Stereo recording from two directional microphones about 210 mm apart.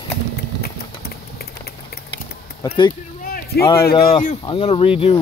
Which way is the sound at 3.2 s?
45° left (ahead or behind).